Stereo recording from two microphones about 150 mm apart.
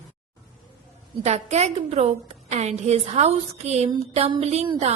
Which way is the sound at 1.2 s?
45° right (ahead or behind).